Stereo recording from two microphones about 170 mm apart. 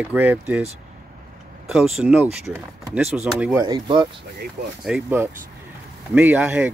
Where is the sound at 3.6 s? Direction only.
25° right (ahead or behind).